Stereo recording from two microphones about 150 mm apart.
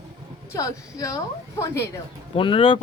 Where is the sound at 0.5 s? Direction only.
20° left (ahead or behind).